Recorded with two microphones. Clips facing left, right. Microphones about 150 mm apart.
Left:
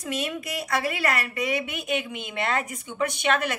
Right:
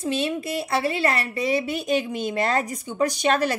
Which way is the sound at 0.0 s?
30° right (ahead or behind).